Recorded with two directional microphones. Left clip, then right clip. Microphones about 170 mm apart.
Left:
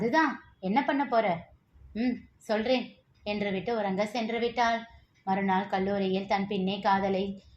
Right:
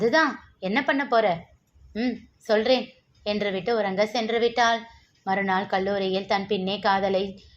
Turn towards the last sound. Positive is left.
turn(degrees=-10)  # may be behind; listen again after turning